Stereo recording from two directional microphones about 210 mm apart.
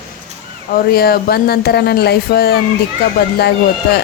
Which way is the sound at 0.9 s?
45° left (ahead or behind).